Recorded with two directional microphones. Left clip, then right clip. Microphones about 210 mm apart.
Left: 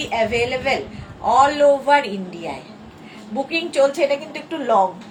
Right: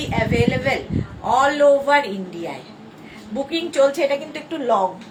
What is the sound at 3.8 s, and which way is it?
A woman's voice, 15° right (ahead or behind).